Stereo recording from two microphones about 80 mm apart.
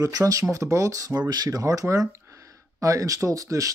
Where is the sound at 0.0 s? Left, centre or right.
Right.